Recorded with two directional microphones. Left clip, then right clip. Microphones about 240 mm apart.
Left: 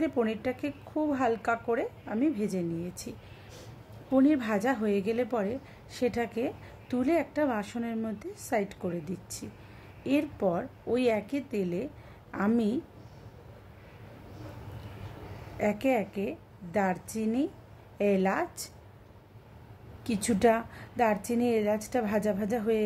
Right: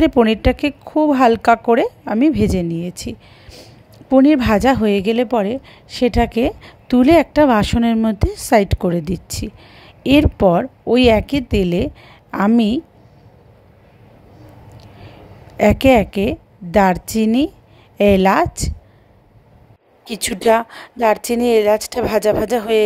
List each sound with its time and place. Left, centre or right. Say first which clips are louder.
0.0 s a woman's voice: right 16 dB; right
15.5 s a woman's voice: right 16 dB; right
20.1 s a woman's voice: right 10 dB; right